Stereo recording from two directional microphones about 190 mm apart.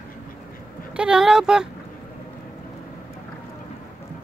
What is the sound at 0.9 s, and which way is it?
Speech, 5° right (ahead or behind).